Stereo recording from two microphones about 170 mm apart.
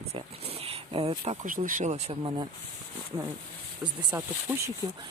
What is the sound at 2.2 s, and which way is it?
Speech, 25° right (ahead or behind).